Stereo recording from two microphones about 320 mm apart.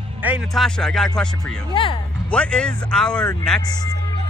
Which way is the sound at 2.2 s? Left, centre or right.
Centre.